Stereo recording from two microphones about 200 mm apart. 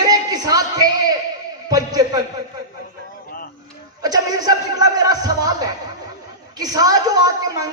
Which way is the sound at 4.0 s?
20° right (ahead or behind).